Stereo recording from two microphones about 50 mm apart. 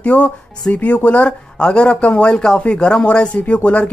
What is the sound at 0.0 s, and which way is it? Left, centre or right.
Speech, left.